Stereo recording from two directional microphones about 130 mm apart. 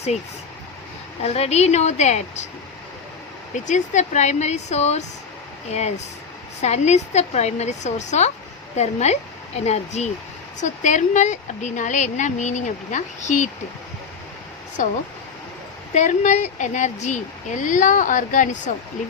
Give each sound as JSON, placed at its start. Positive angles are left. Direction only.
{"t": 1.2, "sound": "a woman's voice", "side_deg": 55}
{"t": 3.5, "sound": "a woman's voice", "side_deg": 70}
{"t": 6.6, "sound": "a woman's voice", "side_deg": 60}
{"t": 10.6, "sound": "a woman's voice", "side_deg": 70}
{"t": 14.8, "sound": "speech", "side_deg": 80}
{"t": 16.0, "sound": "a woman's voice", "side_deg": 65}